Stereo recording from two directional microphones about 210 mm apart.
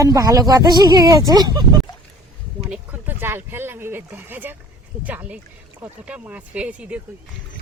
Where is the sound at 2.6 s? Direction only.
5° right (ahead or behind).